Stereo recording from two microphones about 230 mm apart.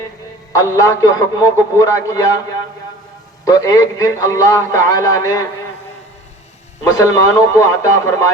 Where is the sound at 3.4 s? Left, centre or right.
Centre.